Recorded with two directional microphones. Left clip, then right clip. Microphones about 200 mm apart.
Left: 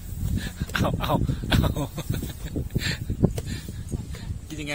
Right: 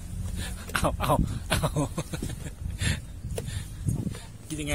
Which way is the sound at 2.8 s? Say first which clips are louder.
Left 6 dB; 15° right (ahead or behind).